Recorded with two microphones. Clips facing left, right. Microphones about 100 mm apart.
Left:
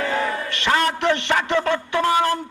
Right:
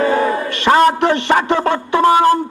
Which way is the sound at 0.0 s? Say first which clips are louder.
Right 8 dB; 30° right (ahead or behind).